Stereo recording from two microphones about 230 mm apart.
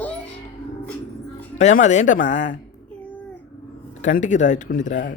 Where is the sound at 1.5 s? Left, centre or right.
Left.